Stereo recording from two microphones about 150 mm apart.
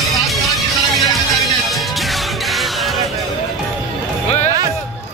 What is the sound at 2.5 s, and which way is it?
Music, centre (ahead or behind).